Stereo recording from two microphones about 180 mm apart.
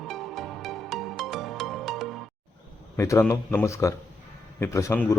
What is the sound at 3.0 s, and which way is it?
A man's voice, 15° left (ahead or behind).